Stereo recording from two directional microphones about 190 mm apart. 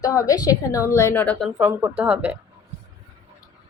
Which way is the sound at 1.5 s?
10° right (ahead or behind).